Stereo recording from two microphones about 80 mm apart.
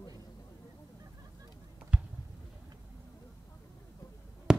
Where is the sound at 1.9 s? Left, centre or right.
Centre.